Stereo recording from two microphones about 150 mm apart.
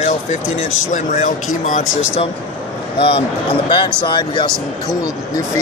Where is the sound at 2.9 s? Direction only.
40° left (ahead or behind).